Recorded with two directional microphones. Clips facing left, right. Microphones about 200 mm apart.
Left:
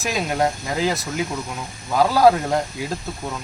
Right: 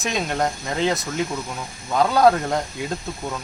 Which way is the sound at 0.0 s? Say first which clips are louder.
Left 2 dB; 5° left (ahead or behind).